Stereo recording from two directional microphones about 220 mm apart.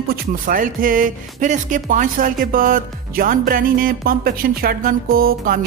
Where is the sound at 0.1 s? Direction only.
40° right (ahead or behind).